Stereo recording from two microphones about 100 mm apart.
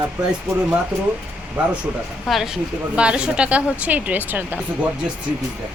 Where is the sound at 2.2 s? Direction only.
Centre (ahead or behind); by 4.9 s 20° right (ahead or behind).